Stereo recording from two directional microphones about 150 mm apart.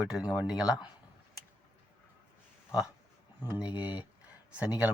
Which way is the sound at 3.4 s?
10° right (ahead or behind).